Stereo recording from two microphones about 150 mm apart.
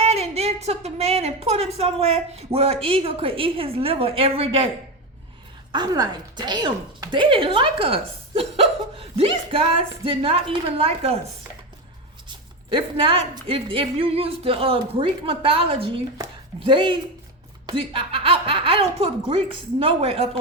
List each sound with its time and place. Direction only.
0.0 s a woman's voice: 45° right (ahead or behind)
5.7 s a woman's voice: 25° right (ahead or behind)
12.7 s a woman's voice: 35° right (ahead or behind)